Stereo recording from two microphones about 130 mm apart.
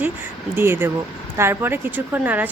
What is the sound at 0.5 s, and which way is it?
Speech, 15° right (ahead or behind).